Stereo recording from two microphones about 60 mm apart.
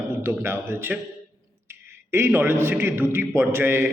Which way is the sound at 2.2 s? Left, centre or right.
Right.